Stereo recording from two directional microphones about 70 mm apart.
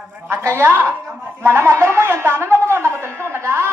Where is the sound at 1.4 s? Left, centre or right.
Right.